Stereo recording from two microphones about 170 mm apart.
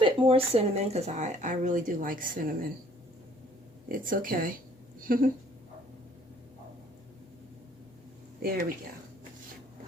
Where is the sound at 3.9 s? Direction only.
55° right (ahead or behind).